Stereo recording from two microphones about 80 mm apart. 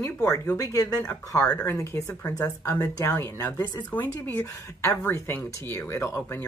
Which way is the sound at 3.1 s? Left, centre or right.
Left.